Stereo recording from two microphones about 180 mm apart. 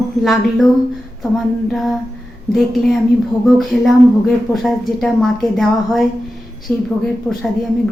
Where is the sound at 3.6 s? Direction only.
Centre (ahead or behind).